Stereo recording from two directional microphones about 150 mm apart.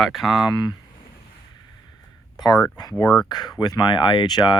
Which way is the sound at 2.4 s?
30° left (ahead or behind).